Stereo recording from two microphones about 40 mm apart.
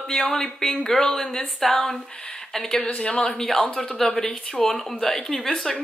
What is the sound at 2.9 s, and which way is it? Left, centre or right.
Speech, left.